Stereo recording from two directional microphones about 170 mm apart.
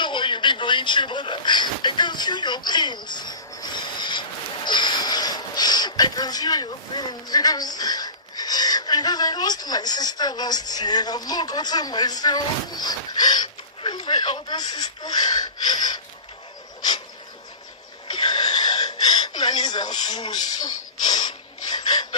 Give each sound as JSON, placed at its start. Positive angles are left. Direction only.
{"t": 0.0, "sound": "a sound", "side_deg": 30}
{"t": 4.6, "sound": "speech", "side_deg": 25}
{"t": 18.1, "sound": "gasp", "side_deg": 25}